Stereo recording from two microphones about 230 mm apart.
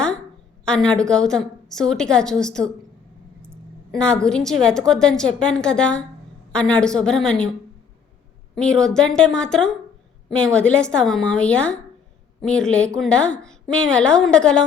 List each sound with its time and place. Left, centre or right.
0.6 s a woman's voice: centre
8.5 s a woman's voice: centre